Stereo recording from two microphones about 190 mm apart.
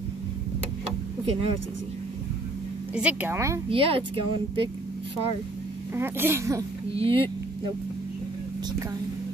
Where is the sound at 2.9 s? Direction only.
5° right (ahead or behind).